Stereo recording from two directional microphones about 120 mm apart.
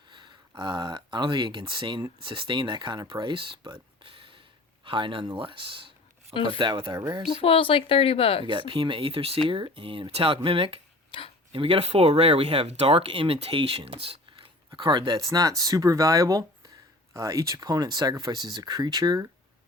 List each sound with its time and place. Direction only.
0.1 s speech: 40° right (ahead or behind)
6.3 s a woman's voice: 50° left (ahead or behind)
6.6 s speech: 40° right (ahead or behind)
6.9 s speech: 30° right (ahead or behind)
7.4 s a woman's voice: 50° left (ahead or behind)
8.4 s speech: 40° right (ahead or behind)
11.1 s a woman's voice: 45° left (ahead or behind)
11.5 s speech: 50° right (ahead or behind); by 19.3 s 35° right (ahead or behind)